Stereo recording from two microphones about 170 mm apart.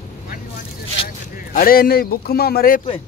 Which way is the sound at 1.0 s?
60° left (ahead or behind).